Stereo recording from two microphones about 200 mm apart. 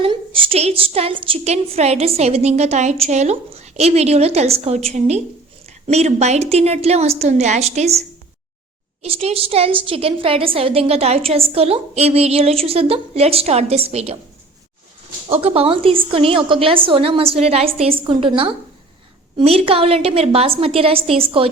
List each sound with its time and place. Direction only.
0.0 s a woman's voice: 25° right (ahead or behind)
15.3 s a woman's voice: 30° right (ahead or behind)